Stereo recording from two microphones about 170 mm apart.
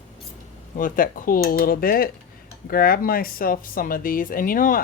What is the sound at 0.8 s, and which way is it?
Speech, 55° left (ahead or behind).